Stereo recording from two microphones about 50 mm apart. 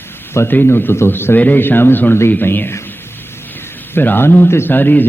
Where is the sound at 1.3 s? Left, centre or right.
Left.